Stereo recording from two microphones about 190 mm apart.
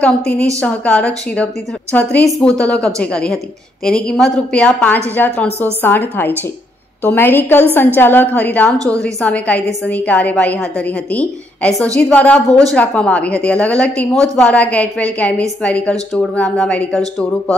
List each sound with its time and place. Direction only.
0.6 s a woman's voice: 5° left (ahead or behind)
8.7 s a woman's voice: 15° right (ahead or behind)
9.0 s a woman's voice: 5° left (ahead or behind)